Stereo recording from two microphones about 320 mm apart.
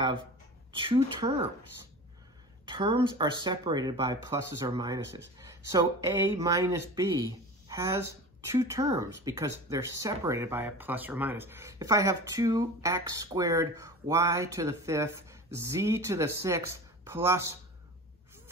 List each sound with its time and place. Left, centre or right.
0.7 s speech: centre
2.6 s speech: centre